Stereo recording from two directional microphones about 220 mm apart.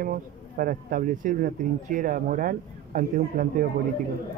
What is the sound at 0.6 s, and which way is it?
Speech, 40° right (ahead or behind).